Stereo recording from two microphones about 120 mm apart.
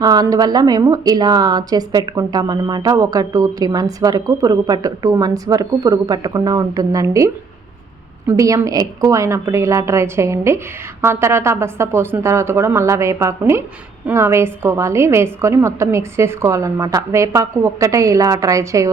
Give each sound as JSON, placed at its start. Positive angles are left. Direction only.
{"t": 0.0, "sound": "a woman's voice", "side_deg": -30}
{"t": 8.3, "sound": "a woman's voice", "side_deg": -25}